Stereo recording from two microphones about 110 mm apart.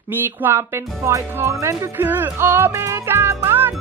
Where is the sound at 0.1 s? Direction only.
20° right (ahead or behind).